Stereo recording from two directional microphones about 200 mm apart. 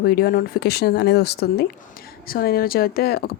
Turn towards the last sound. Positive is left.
turn(degrees=50)  # may be behind; listen again after turning